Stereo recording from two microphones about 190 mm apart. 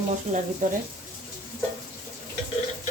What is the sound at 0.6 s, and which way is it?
Speech, 45° right (ahead or behind).